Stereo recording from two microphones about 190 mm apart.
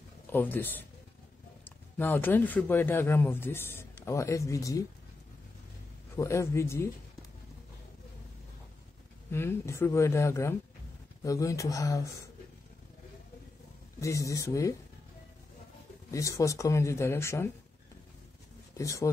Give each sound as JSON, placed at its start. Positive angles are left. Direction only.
{"t": 0.3, "sound": "speech", "side_deg": 10}
{"t": 6.1, "sound": "speech", "side_deg": 15}
{"t": 9.3, "sound": "speech", "side_deg": 15}
{"t": 14.0, "sound": "speech", "side_deg": 15}
{"t": 16.1, "sound": "speech", "side_deg": 15}
{"t": 18.8, "sound": "speech", "side_deg": 15}